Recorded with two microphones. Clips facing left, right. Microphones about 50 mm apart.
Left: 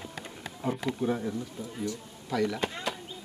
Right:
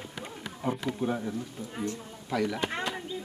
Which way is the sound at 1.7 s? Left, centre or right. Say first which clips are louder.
Right 1 dB; right.